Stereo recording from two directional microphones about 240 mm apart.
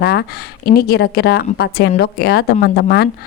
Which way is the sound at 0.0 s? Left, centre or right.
Left.